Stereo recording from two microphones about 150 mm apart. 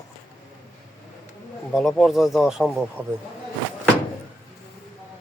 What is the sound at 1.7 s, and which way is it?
Speech, centre (ahead or behind).